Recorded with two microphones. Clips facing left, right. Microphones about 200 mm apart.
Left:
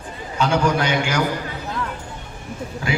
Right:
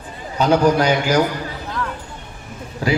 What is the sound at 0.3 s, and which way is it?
Speech, 40° right (ahead or behind).